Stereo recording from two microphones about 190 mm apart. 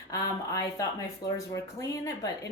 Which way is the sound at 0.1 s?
20° left (ahead or behind).